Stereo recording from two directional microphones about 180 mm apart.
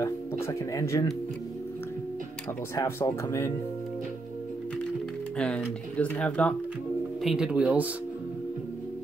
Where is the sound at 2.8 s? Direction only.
15° left (ahead or behind).